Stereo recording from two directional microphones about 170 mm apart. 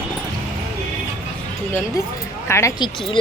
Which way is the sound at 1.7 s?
20° left (ahead or behind).